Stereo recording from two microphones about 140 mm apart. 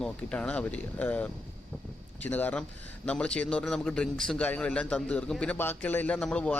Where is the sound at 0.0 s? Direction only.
10° left (ahead or behind).